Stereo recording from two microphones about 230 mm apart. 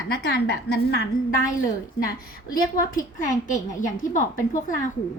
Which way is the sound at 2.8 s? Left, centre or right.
Left.